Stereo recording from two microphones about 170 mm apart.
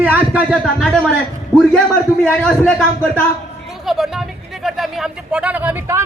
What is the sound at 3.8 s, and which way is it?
A man's voice, centre (ahead or behind).